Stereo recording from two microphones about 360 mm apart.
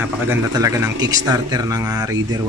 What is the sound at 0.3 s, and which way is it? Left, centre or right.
A man's voice, centre.